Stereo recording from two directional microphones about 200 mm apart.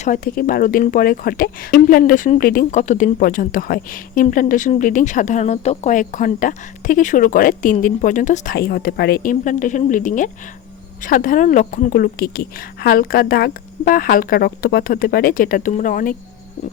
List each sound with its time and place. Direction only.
0.0 s speech: 45° left (ahead or behind)